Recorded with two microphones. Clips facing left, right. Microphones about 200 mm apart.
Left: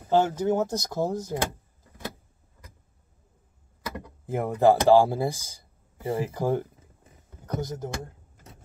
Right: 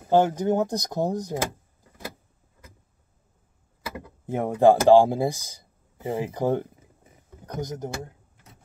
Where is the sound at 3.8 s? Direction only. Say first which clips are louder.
Even; 10° right (ahead or behind).